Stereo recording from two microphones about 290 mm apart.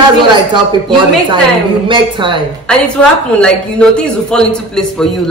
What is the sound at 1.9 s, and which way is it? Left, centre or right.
Speech, centre.